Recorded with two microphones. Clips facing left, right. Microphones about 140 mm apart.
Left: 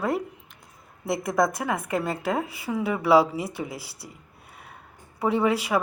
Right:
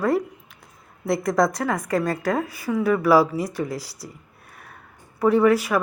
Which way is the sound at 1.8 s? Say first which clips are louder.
Right 4 dB; 20° left (ahead or behind).